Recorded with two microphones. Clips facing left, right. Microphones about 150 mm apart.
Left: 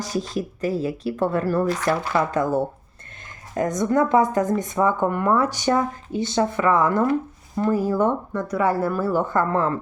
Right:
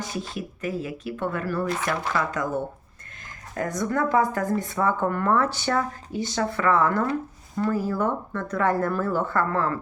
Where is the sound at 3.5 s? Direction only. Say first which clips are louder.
Left 6 dB; 20° left (ahead or behind).